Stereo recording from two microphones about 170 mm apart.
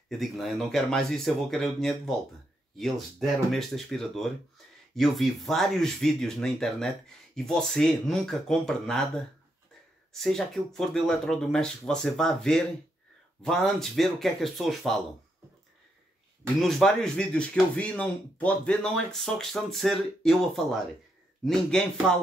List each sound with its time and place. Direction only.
0.2 s speech: centre (ahead or behind)
16.6 s speech: 5° left (ahead or behind)